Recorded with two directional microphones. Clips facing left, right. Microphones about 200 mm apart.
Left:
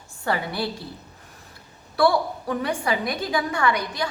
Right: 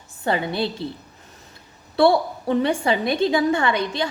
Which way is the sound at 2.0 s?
25° right (ahead or behind).